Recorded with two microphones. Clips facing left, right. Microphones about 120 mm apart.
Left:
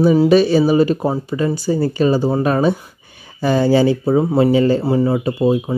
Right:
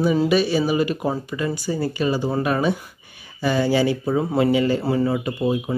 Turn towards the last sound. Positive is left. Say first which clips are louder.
# left 6 dB
turn(degrees=30)  # may be behind; listen again after turning